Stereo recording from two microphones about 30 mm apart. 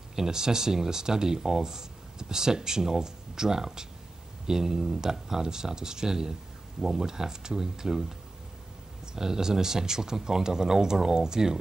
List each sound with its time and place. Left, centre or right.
0.1 s speech: centre
9.1 s speech: centre